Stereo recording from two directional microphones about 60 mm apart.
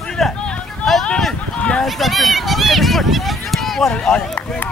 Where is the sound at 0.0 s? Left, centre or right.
Centre.